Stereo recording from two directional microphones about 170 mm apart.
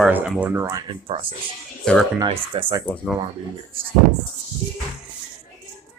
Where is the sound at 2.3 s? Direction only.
30° right (ahead or behind).